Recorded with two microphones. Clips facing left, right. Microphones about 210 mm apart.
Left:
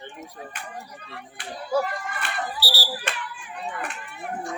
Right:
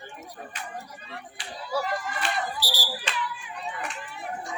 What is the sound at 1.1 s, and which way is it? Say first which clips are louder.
Speech: left 3 dB; 55° left (ahead or behind).